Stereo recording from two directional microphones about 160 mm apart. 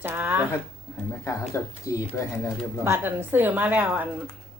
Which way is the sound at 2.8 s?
15° right (ahead or behind).